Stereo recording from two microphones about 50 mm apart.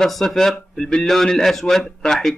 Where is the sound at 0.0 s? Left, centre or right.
Centre.